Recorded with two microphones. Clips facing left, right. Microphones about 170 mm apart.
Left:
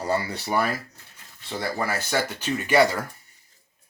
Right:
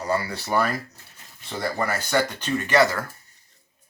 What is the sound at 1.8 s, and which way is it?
Speech, 5° left (ahead or behind).